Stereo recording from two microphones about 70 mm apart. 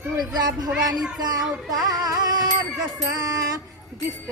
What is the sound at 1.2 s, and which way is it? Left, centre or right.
Music, right.